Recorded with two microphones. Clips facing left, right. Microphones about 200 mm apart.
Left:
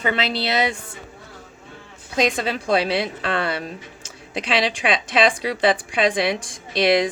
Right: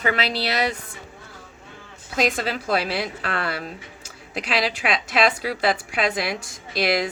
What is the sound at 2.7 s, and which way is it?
A woman's voice, 25° left (ahead or behind).